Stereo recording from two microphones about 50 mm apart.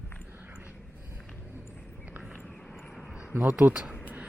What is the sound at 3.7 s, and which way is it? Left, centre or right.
Speech, centre.